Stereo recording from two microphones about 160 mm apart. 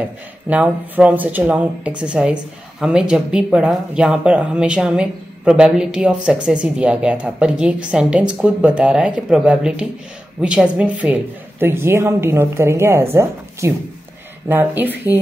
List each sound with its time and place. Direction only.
0.5 s speech: 10° right (ahead or behind)